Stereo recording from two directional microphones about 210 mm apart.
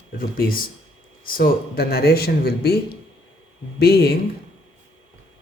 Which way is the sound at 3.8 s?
50° left (ahead or behind).